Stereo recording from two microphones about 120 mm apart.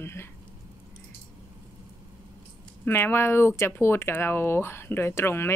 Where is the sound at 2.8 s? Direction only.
20° left (ahead or behind).